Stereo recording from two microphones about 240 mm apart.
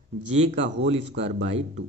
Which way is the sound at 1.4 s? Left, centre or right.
Right.